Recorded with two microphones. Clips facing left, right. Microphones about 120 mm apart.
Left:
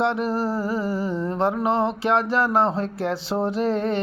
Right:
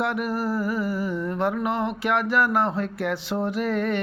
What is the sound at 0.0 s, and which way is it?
Music, 30° left (ahead or behind).